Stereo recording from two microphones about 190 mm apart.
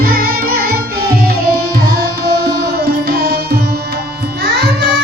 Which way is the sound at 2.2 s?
55° right (ahead or behind).